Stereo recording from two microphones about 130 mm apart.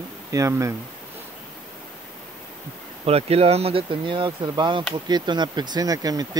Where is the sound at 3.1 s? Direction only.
50° right (ahead or behind).